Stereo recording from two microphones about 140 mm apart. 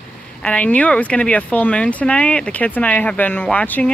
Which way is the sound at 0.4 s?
10° left (ahead or behind).